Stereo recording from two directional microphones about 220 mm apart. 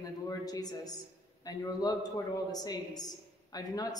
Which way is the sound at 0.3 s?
15° left (ahead or behind).